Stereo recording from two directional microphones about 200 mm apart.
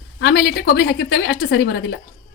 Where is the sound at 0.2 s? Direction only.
55° left (ahead or behind).